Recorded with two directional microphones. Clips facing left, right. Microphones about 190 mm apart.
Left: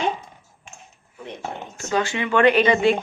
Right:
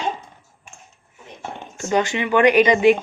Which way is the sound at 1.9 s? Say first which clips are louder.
Right 3 dB; 20° right (ahead or behind).